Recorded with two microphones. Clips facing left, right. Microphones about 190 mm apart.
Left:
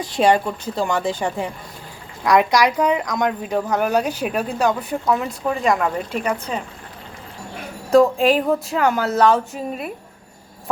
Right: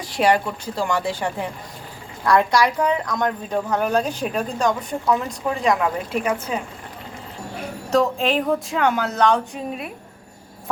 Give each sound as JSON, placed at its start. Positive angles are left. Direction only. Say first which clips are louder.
{"t": 0.1, "sound": "a woman's voice", "louder": "left 2 dB", "side_deg": 25}
{"t": 7.9, "sound": "speech", "louder": "left 5 dB", "side_deg": 10}